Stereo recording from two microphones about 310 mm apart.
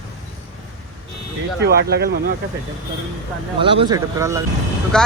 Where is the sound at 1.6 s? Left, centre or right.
Right.